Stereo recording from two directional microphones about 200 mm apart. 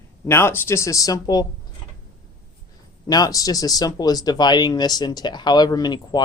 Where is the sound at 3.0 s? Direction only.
20° left (ahead or behind).